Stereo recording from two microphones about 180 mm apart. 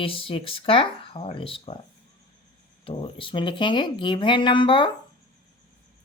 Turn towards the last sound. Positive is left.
turn(degrees=25)  # may be behind; listen again after turning